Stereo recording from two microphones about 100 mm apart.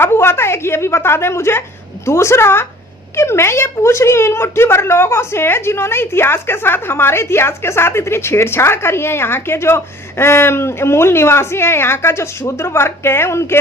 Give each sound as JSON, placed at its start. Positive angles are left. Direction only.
{"t": 0.0, "sound": "a woman's voice", "side_deg": 25}